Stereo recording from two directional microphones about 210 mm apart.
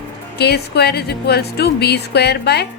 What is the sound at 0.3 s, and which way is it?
Speech, 50° left (ahead or behind).